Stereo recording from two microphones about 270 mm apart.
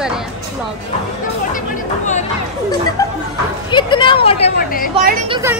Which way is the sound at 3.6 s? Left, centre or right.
Centre.